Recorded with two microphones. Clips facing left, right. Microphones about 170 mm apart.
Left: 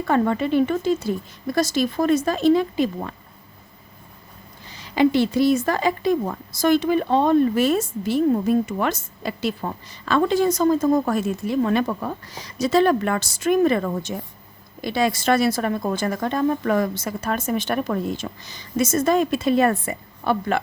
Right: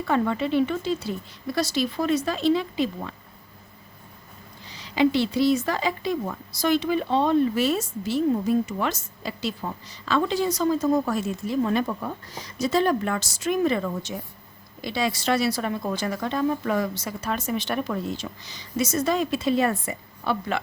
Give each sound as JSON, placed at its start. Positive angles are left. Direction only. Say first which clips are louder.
{"t": 0.0, "sound": "a woman's voice", "louder": "left 3 dB", "side_deg": 50}
{"t": 4.7, "sound": "a woman's voice", "louder": "left 3 dB", "side_deg": 50}